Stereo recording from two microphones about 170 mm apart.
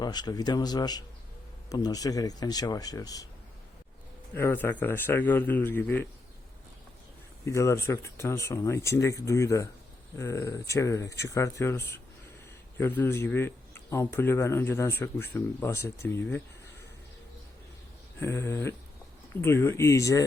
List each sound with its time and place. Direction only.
0.0 s speech: 25° left (ahead or behind)
4.4 s a man's voice: 15° left (ahead or behind)
7.4 s a man's voice: 15° left (ahead or behind)
18.2 s a man's voice: 15° left (ahead or behind)